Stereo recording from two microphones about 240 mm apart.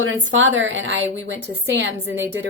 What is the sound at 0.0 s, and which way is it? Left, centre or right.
A woman's voice, right.